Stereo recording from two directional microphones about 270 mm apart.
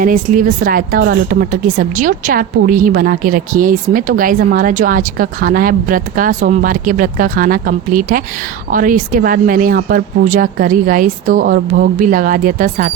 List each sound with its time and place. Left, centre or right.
0.0 s speech: right